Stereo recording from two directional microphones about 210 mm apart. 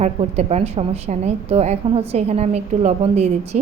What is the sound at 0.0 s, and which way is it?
A woman's voice, 30° right (ahead or behind).